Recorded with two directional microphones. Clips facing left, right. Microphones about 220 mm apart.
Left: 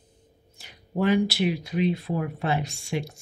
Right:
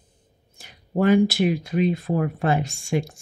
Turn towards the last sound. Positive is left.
turn(degrees=-50)  # may be behind; listen again after turning